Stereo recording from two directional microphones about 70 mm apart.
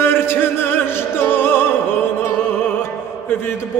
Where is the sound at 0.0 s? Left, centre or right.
Left.